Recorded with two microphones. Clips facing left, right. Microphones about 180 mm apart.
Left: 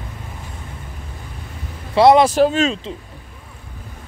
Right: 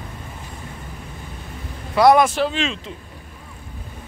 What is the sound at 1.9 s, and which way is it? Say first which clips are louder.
Speech: left 2 dB; 25° left (ahead or behind).